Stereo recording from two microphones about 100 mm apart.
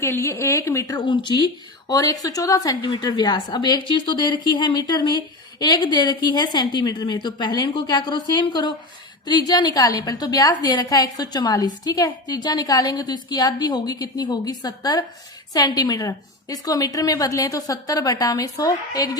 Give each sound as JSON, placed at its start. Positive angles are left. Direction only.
{"t": 0.0, "sound": "a woman's voice", "side_deg": 30}
{"t": 1.0, "sound": "speech", "side_deg": 50}
{"t": 1.9, "sound": "a woman's voice", "side_deg": 35}
{"t": 2.9, "sound": "a woman's voice", "side_deg": 50}